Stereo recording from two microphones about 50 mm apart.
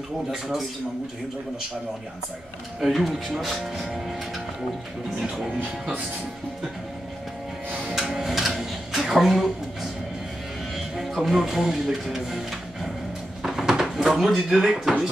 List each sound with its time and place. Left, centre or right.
2.8 s speech: centre
7.9 s a sound: centre
11.2 s speech: centre
13.4 s drawer open or close: centre
14.5 s speech: centre